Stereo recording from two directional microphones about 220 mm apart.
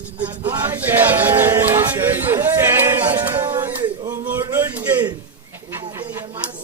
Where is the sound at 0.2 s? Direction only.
10° right (ahead or behind).